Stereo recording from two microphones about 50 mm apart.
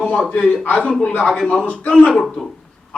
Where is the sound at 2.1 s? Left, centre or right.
Centre.